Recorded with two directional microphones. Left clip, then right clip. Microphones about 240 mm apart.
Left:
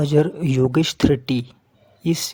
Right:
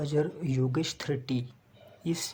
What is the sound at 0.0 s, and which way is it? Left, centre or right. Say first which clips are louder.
Speech: left 11 dB; left.